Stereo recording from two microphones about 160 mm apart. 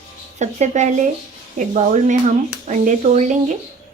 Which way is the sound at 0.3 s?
45° right (ahead or behind).